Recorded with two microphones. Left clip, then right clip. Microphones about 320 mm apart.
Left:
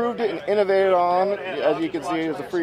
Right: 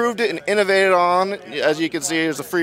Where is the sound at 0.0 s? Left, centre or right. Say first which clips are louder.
Right 4 dB; right.